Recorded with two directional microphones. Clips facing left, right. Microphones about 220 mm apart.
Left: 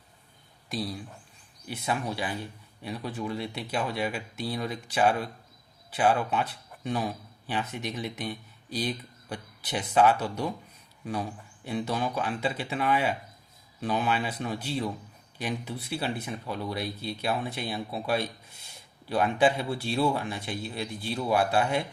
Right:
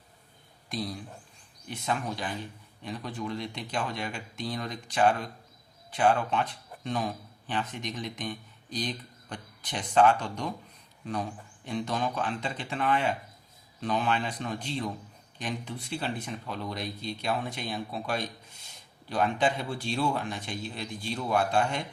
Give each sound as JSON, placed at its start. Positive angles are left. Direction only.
{"t": 0.7, "sound": "speech", "side_deg": 5}